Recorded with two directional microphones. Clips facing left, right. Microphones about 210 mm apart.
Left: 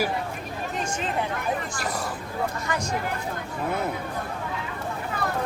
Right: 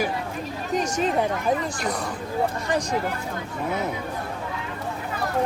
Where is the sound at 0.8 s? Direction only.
40° right (ahead or behind).